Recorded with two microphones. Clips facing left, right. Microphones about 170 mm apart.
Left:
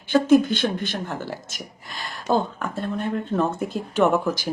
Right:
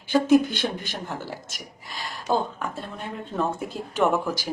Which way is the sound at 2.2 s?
5° right (ahead or behind).